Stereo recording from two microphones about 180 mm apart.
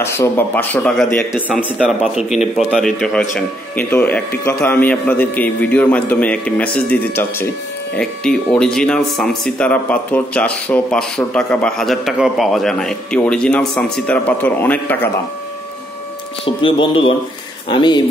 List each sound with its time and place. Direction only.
0.0 s a man's voice: 15° left (ahead or behind)
16.4 s speech: 30° left (ahead or behind)